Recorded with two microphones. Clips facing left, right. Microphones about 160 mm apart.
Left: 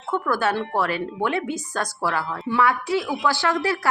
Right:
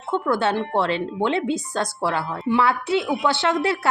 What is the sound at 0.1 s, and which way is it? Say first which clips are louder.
Speech: right 2 dB; 25° right (ahead or behind).